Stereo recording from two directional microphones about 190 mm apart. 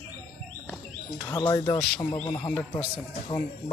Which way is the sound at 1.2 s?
20° left (ahead or behind).